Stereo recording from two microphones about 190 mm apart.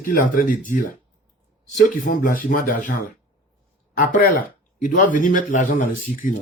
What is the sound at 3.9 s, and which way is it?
Speech, 50° left (ahead or behind).